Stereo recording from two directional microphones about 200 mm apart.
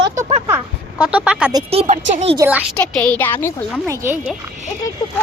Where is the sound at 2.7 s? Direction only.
5° left (ahead or behind).